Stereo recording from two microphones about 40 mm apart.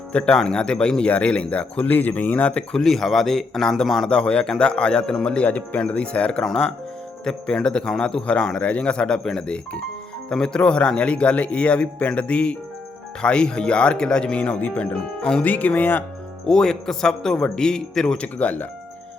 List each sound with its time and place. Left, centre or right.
0.1 s a man's voice: left
1.9 s speech: left
2.8 s a man's voice: centre
4.1 s a man's voice: left
5.5 s speech: left
7.3 s a man's voice: centre
14.7 s speech: left
15.2 s a man's voice: left
15.4 s speech: left
16.5 s a man's voice: centre
18.0 s speech: left